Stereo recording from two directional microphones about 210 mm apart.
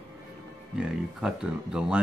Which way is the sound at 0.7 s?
5° right (ahead or behind).